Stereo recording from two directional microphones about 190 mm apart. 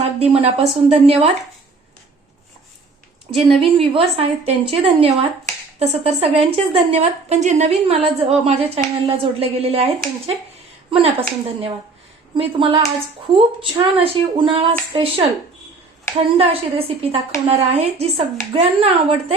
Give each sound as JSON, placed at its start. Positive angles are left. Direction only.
{"t": 0.0, "sound": "a woman's voice", "side_deg": -30}
{"t": 3.6, "sound": "a woman's voice", "side_deg": -30}